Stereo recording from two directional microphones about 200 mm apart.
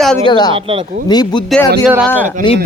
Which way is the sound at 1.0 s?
20° left (ahead or behind).